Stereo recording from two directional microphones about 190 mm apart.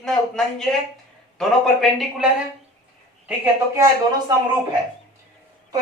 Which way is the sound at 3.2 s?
10° right (ahead or behind).